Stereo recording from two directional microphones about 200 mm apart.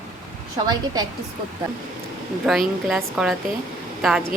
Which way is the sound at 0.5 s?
20° right (ahead or behind).